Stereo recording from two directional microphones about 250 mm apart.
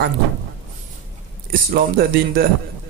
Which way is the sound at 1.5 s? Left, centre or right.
Right.